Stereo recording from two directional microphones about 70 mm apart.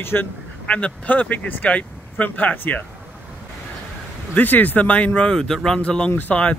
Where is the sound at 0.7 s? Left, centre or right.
Centre.